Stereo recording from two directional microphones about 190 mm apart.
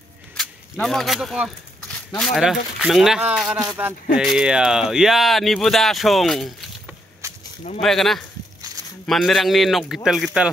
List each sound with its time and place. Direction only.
0.4 s speech: centre (ahead or behind)
7.2 s a sound: 15° right (ahead or behind)
7.8 s speech: centre (ahead or behind)